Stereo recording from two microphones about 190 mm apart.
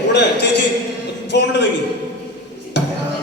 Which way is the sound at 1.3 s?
65° left (ahead or behind).